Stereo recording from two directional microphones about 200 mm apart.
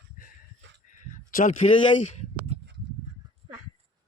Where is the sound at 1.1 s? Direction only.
40° left (ahead or behind).